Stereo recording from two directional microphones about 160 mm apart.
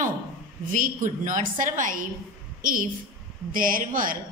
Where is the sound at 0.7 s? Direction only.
55° right (ahead or behind).